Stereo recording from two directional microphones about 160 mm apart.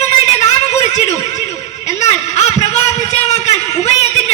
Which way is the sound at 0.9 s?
45° left (ahead or behind).